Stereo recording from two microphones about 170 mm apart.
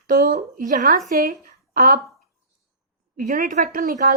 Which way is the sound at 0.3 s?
50° right (ahead or behind).